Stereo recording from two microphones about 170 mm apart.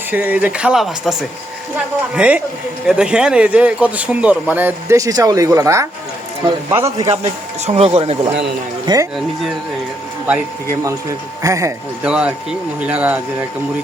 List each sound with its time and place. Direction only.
0.1 s speech: 10° right (ahead or behind)
7.6 s speech: 40° right (ahead or behind)
10.2 s speech: 20° right (ahead or behind)
12.0 s speech: 5° right (ahead or behind)